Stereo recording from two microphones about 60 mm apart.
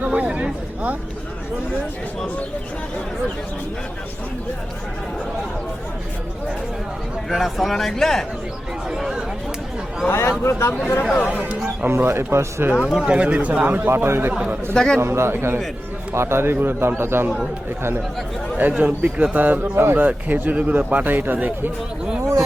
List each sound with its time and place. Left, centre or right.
0.0 s speech: right
7.3 s speech: centre
8.9 s speech: centre
10.1 s speech: left
11.0 s speech: centre
11.3 s speech: centre
11.9 s speech: right
12.8 s speech: centre
13.1 s speech: right
18.7 s speech: right
20.1 s speech: right
22.2 s a sound: right